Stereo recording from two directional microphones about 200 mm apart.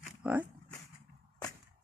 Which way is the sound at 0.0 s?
5° right (ahead or behind).